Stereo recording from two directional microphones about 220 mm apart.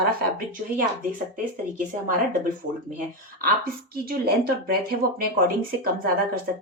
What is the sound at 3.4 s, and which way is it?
Speech, 40° right (ahead or behind).